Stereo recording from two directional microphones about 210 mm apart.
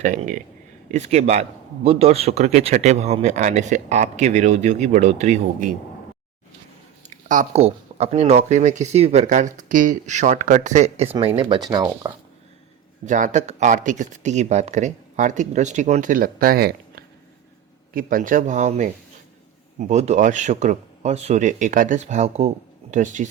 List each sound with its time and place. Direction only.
0.0 s speech: 40° right (ahead or behind)
7.1 s speech: 35° right (ahead or behind); by 12.1 s 20° right (ahead or behind)
13.1 s speech: 35° right (ahead or behind)